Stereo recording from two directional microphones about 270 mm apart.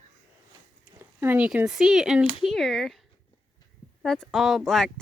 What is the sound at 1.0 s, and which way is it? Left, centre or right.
Speech, centre.